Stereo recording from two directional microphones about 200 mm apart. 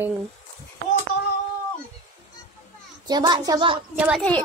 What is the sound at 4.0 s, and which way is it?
Speech, centre (ahead or behind).